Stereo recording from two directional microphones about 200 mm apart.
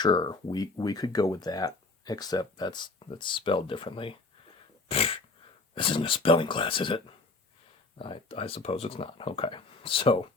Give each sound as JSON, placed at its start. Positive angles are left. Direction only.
{"t": 0.0, "sound": "speech", "side_deg": 20}